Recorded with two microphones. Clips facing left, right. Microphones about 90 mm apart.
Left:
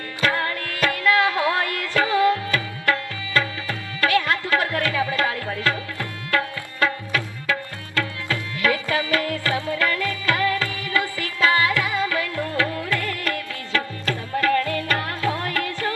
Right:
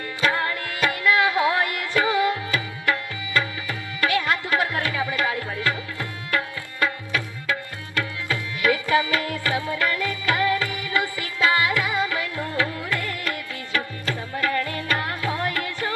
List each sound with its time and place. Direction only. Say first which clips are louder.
0.2 s music: even; 20° right (ahead or behind)